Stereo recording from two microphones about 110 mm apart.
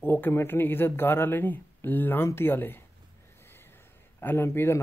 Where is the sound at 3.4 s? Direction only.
20° left (ahead or behind).